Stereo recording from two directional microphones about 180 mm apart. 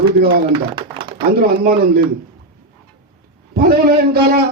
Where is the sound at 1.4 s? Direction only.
60° right (ahead or behind).